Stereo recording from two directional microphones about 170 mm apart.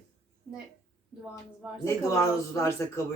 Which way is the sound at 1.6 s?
5° right (ahead or behind).